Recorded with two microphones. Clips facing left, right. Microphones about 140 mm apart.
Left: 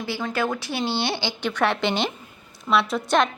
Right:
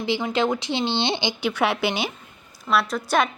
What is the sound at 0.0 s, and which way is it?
A woman's voice, 15° right (ahead or behind).